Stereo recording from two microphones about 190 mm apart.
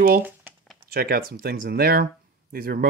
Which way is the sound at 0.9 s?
55° right (ahead or behind).